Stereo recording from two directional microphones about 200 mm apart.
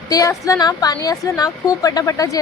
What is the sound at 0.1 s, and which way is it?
A woman's voice, 15° left (ahead or behind).